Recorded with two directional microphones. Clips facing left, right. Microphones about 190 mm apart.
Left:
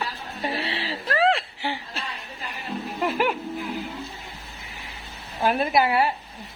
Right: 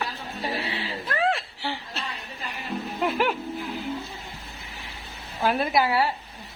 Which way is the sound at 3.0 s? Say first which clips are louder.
Left 1 dB; 5° left (ahead or behind).